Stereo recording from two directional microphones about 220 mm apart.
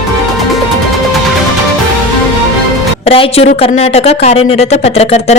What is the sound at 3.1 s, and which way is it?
Speech, 25° left (ahead or behind).